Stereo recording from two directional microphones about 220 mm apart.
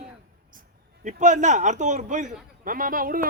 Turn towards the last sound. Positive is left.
turn(degrees=-40)  # may be behind; listen again after turning